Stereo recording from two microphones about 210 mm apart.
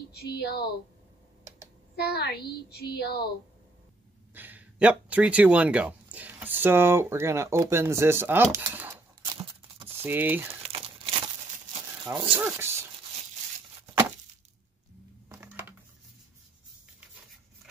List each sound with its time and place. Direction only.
0.1 s a woman's voice: 50° left (ahead or behind)
2.0 s a woman's voice: 50° left (ahead or behind)
4.3 s speech: 10° right (ahead or behind)
9.2 s a sound: 25° right (ahead or behind)
10.0 s speech: 10° right (ahead or behind)
10.6 s crumpling: 25° right (ahead or behind)
12.4 s speech: 10° right (ahead or behind)
15.2 s a sound: 10° right (ahead or behind)